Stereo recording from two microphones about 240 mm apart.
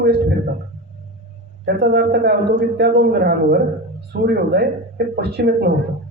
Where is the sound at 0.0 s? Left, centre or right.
Right.